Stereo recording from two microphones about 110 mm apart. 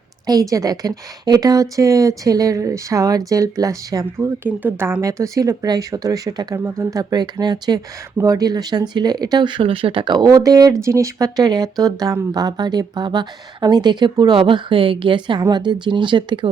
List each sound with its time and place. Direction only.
0.3 s speech: 35° right (ahead or behind)
4.4 s speech: 20° right (ahead or behind); by 16.5 s 45° right (ahead or behind)